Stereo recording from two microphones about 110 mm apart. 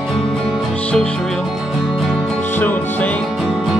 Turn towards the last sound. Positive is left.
turn(degrees=15)  # may be behind; listen again after turning